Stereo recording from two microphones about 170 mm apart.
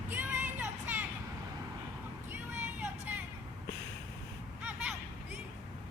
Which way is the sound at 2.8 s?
10° right (ahead or behind).